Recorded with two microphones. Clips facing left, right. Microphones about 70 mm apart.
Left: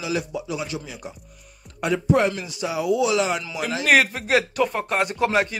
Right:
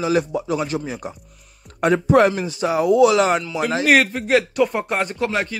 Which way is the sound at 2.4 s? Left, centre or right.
Right.